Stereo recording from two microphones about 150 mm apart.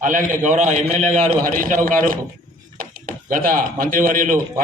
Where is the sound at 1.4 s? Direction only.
65° right (ahead or behind).